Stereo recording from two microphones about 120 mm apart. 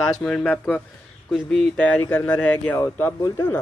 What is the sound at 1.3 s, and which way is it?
Speech, 5° left (ahead or behind).